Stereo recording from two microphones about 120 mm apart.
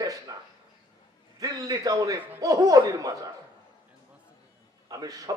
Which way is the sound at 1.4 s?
30° right (ahead or behind).